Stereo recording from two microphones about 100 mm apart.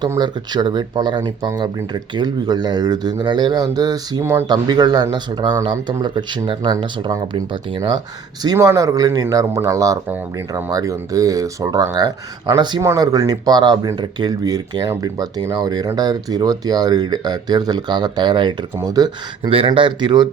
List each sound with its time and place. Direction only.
0.2 s speech: 45° right (ahead or behind); by 4.4 s 30° right (ahead or behind)
4.4 s speech: 45° right (ahead or behind)
8.6 s speech: 35° right (ahead or behind)
12.8 s speech: 35° right (ahead or behind)
19.4 s speech: 65° right (ahead or behind)